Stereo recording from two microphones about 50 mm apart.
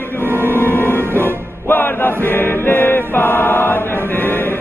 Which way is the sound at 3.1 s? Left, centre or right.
Left.